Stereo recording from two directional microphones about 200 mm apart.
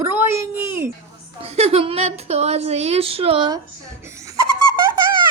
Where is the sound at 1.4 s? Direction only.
30° right (ahead or behind).